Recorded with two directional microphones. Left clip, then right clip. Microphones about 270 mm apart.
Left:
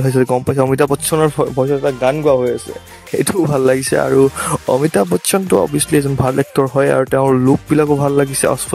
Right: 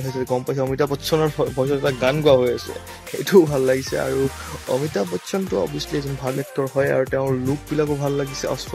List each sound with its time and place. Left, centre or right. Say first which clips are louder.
0.1 s speech: left 7 dB; left
1.7 s speech: left 5 dB; centre
3.2 s speech: left 1 dB; left